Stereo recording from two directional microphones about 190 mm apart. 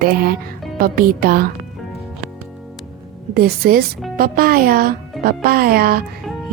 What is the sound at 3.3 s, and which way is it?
A woman's voice, 50° right (ahead or behind).